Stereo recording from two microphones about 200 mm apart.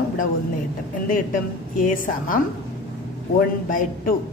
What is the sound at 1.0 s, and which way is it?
A woman's voice, 40° left (ahead or behind).